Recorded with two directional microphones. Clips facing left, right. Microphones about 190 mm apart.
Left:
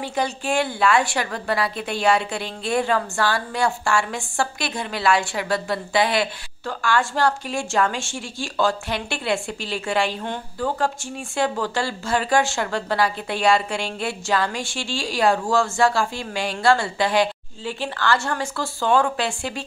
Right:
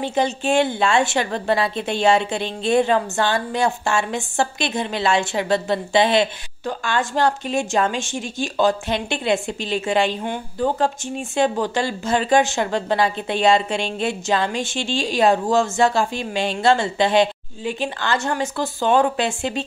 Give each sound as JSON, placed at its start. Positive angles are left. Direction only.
{"t": 0.0, "sound": "a woman's voice", "side_deg": -25}